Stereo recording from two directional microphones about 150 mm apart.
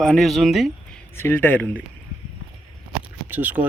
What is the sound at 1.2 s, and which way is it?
Speech, 15° left (ahead or behind).